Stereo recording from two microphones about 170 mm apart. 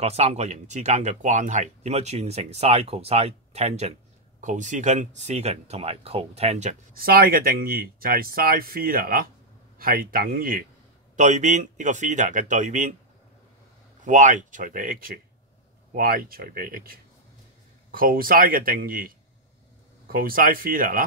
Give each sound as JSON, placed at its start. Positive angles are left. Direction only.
{"t": 0.0, "sound": "speech", "side_deg": -40}
{"t": 6.9, "sound": "speech", "side_deg": -60}
{"t": 11.1, "sound": "speech", "side_deg": -45}
{"t": 14.0, "sound": "speech", "side_deg": -50}